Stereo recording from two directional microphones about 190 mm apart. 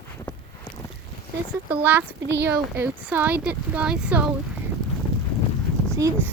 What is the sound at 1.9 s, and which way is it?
Speech, 10° right (ahead or behind).